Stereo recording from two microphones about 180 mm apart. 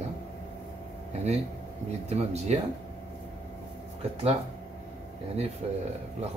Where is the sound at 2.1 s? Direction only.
35° right (ahead or behind).